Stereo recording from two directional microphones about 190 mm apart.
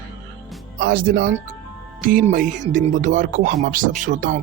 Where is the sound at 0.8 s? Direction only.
55° right (ahead or behind).